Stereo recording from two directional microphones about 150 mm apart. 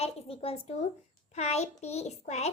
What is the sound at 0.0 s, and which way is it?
A woman's voice, 40° left (ahead or behind).